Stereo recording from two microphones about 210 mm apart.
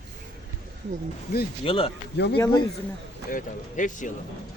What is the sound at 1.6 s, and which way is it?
Speech, 25° left (ahead or behind).